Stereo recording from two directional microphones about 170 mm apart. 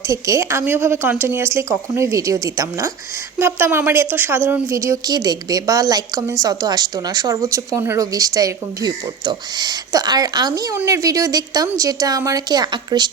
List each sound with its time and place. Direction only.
0.1 s a woman's voice: 15° right (ahead or behind)